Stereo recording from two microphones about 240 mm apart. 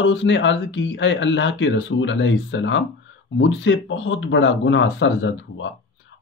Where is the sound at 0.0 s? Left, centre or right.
Left.